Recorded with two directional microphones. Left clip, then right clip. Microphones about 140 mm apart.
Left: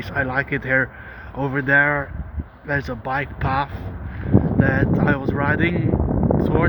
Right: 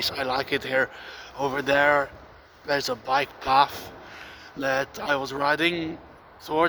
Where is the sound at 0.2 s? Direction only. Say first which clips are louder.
Left 4 dB; 20° right (ahead or behind).